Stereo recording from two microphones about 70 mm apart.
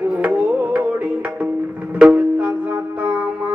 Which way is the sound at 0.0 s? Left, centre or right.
Right.